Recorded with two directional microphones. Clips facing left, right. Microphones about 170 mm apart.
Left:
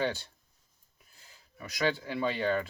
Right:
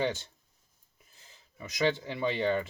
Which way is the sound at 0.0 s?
20° right (ahead or behind).